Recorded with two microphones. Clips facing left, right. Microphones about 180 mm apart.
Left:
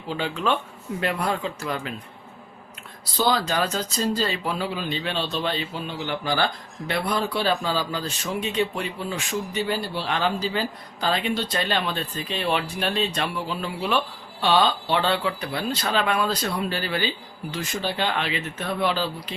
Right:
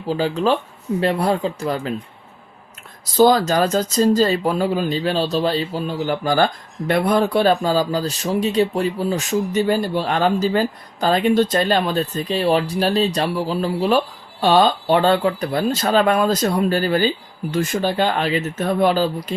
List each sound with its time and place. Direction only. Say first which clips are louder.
0.1 s speech: right 7 dB; 35° right (ahead or behind)
3.0 s speech: right 9 dB; 45° right (ahead or behind)